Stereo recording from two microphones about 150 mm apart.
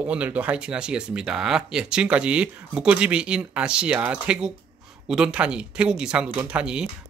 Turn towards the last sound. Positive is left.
turn(degrees=-5)  # may be behind; listen again after turning